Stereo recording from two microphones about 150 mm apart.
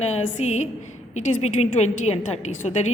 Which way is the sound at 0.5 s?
50° left (ahead or behind).